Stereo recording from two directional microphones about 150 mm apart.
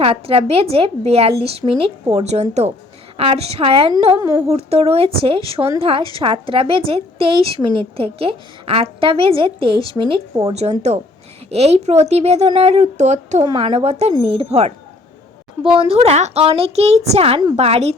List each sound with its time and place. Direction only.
0.0 s a woman's voice: 40° right (ahead or behind)
4.2 s speech: 20° right (ahead or behind)
4.4 s a woman's voice: 45° right (ahead or behind)
13.5 s a woman's voice: 35° right (ahead or behind)
15.7 s a woman's voice: 40° right (ahead or behind)